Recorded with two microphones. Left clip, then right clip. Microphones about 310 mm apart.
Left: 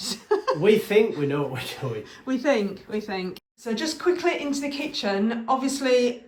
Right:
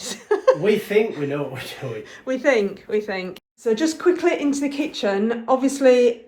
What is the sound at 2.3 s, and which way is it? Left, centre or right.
Speech, centre.